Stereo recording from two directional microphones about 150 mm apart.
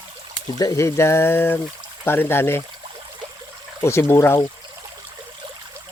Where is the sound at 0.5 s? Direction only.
25° left (ahead or behind).